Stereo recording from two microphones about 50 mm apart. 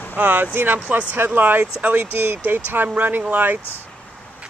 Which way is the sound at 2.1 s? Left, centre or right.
Right.